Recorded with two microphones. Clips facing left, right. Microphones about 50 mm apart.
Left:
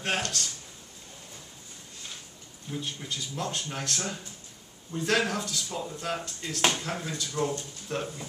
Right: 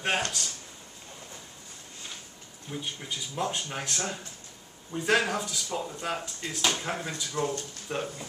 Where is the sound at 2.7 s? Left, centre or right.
Centre.